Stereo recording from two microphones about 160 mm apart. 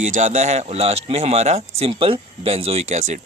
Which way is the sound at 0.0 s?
50° right (ahead or behind).